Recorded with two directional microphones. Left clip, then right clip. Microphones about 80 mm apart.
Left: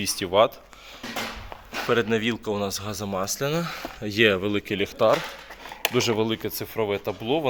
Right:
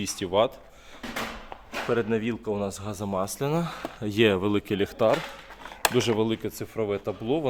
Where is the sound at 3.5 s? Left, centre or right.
Right.